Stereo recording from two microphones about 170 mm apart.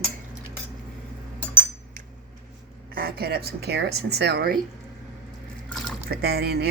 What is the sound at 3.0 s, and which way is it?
Speech, 65° right (ahead or behind).